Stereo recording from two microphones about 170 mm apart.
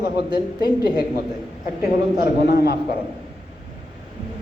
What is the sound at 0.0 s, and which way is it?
Speech, 65° left (ahead or behind).